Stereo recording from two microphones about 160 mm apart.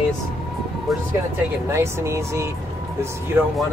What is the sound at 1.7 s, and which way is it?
Speech, 15° right (ahead or behind).